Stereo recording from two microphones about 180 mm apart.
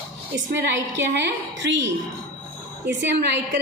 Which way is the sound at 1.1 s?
75° right (ahead or behind).